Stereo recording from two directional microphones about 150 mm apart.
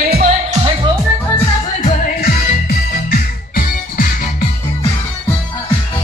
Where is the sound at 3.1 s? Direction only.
70° left (ahead or behind).